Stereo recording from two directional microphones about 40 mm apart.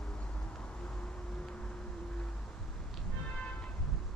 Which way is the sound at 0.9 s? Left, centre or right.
Centre.